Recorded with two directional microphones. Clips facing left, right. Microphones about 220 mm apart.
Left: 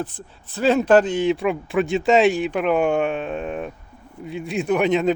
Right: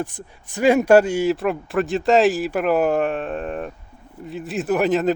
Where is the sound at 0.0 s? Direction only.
15° right (ahead or behind).